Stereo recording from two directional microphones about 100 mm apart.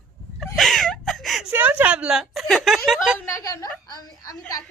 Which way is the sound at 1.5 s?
15° right (ahead or behind).